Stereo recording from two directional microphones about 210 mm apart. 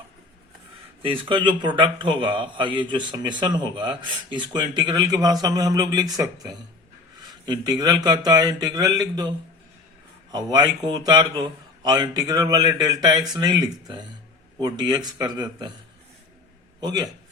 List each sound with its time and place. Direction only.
1.0 s a man's voice: 25° right (ahead or behind)
10.3 s a man's voice: 20° right (ahead or behind)
16.8 s a man's voice: 20° right (ahead or behind)